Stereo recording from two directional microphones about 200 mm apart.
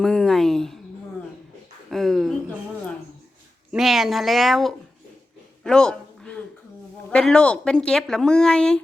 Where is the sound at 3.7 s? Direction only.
Centre (ahead or behind).